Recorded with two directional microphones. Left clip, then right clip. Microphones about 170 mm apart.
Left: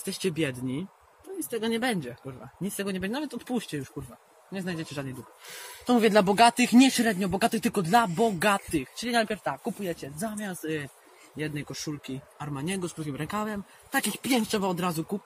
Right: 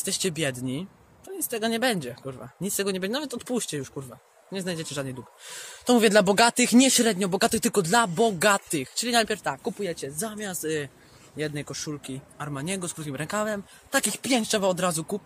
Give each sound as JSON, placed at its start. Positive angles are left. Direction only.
{"t": 0.0, "sound": "speech", "side_deg": -85}
{"t": 4.5, "sound": "speech", "side_deg": -90}